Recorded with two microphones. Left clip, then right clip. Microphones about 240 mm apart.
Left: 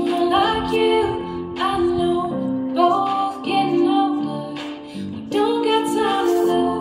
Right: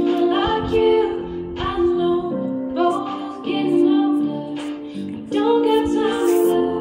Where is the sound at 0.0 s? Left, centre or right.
Left.